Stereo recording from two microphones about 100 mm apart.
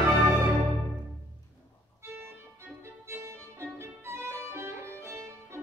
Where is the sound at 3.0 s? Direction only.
25° right (ahead or behind).